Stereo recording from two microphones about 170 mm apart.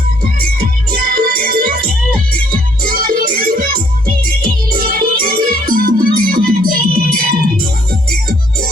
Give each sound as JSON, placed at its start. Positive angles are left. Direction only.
{"t": 1.1, "sound": "music", "side_deg": -60}